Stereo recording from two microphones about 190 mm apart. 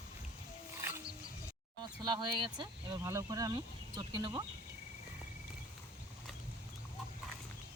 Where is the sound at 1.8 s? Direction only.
25° right (ahead or behind).